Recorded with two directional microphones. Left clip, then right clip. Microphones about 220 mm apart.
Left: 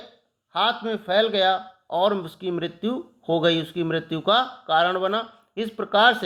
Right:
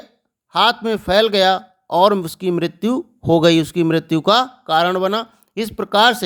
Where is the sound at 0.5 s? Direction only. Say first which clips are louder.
Right 7 dB; 45° right (ahead or behind).